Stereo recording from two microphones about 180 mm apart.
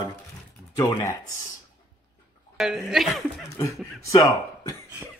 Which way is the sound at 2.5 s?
Centre (ahead or behind).